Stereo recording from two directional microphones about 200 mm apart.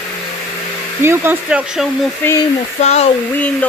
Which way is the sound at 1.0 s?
10° right (ahead or behind).